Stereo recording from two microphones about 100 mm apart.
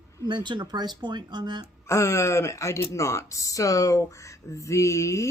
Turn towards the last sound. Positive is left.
turn(degrees=30)  # may be behind; listen again after turning